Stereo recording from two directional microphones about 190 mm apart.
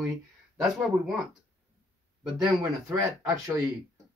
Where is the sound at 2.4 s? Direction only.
15° right (ahead or behind).